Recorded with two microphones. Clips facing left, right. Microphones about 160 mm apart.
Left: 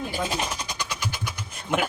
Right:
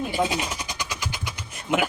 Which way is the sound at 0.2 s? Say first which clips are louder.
Right 4 dB; 15° right (ahead or behind).